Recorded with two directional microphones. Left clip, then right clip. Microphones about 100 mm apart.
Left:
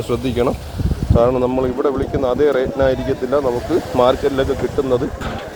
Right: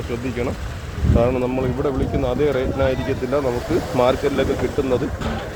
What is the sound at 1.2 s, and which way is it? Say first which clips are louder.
Speech: left 5 dB; 40° left (ahead or behind).